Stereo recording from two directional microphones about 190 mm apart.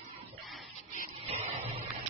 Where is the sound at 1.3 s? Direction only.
30° right (ahead or behind).